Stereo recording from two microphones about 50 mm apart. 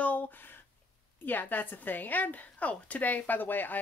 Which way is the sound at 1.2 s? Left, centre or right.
Left.